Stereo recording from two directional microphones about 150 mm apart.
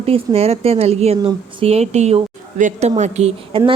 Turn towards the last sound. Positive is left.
turn(degrees=-45)  # may be behind; listen again after turning